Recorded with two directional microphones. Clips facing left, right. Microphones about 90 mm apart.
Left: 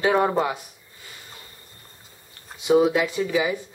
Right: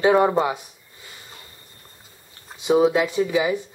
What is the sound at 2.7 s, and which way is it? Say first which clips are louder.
Speech: right 1 dB; 5° right (ahead or behind).